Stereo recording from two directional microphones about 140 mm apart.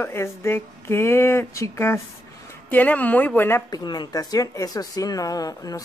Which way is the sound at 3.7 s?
30° left (ahead or behind).